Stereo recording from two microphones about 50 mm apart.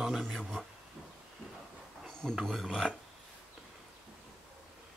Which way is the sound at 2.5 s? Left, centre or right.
Centre.